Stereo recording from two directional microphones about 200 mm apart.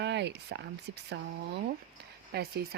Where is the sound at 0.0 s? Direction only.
60° right (ahead or behind).